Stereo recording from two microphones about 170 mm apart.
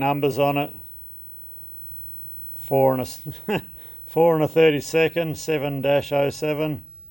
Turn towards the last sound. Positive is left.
turn(degrees=0)  # may be behind; listen again after turning